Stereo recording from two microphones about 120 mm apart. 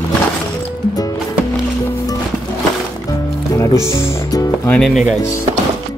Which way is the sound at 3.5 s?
25° left (ahead or behind).